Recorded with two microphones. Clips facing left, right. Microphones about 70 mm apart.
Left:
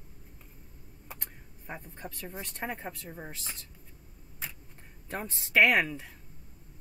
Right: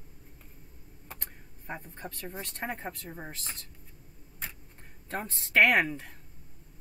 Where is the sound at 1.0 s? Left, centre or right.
Centre.